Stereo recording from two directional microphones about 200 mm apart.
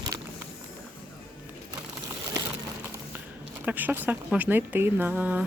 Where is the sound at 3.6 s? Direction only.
10° right (ahead or behind).